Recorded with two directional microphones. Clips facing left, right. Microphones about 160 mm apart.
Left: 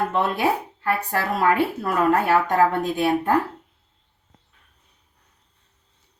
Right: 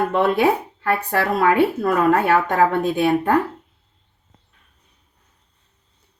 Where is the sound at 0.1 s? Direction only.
65° right (ahead or behind).